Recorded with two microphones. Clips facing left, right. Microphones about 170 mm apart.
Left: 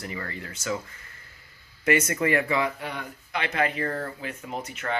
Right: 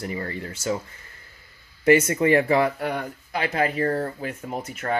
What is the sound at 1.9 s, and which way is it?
Speech, 25° right (ahead or behind).